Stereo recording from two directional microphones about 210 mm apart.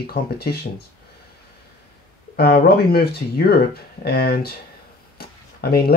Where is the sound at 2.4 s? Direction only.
50° left (ahead or behind).